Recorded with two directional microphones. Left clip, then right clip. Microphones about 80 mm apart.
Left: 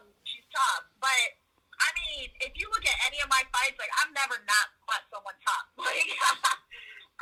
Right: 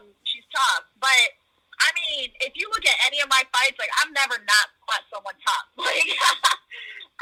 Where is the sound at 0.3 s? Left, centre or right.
Right.